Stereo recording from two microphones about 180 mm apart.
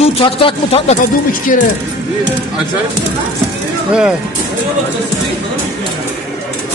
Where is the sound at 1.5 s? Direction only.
50° left (ahead or behind).